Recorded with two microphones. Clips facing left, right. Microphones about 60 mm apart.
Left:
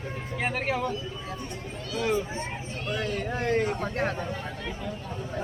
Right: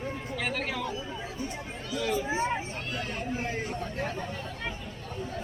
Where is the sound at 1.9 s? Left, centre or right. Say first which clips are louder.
Left 3 dB; left.